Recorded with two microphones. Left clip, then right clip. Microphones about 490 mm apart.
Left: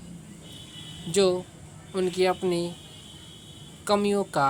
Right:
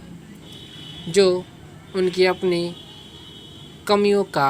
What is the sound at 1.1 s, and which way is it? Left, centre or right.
Speech, left.